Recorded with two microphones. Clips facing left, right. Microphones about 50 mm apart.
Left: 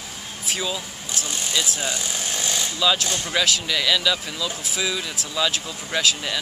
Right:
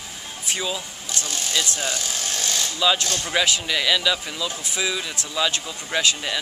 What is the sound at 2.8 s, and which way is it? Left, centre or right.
Speech, centre.